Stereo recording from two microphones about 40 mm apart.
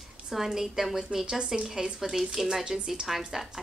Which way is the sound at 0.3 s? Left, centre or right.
Centre.